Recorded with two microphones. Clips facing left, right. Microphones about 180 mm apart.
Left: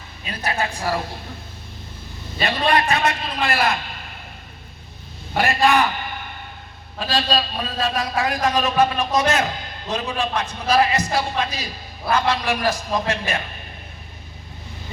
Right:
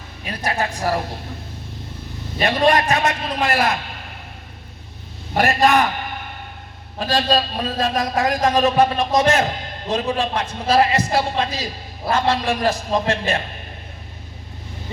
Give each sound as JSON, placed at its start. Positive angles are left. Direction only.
{"t": 0.5, "sound": "a man's voice", "side_deg": -40}
{"t": 2.5, "sound": "a man's voice", "side_deg": -40}
{"t": 5.3, "sound": "a man's voice", "side_deg": -40}
{"t": 7.0, "sound": "a man's voice", "side_deg": -40}